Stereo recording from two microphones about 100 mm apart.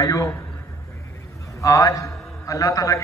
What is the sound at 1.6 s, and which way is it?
A man's voice, 35° left (ahead or behind).